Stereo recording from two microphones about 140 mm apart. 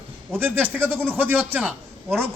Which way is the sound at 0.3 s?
15° right (ahead or behind).